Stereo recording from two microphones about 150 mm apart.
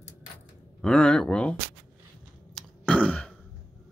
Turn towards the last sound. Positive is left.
turn(degrees=10)  # may be behind; listen again after turning